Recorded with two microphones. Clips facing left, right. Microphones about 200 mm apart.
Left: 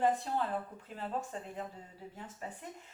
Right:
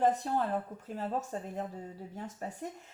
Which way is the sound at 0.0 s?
40° right (ahead or behind).